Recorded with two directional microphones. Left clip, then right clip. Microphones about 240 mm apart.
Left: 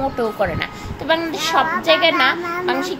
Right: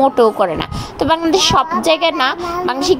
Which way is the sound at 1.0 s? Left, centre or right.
Right.